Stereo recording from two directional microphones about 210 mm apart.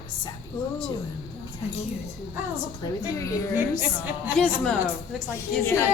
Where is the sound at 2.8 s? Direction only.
15° left (ahead or behind).